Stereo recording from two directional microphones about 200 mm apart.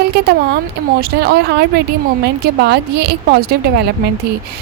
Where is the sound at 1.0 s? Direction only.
50° right (ahead or behind).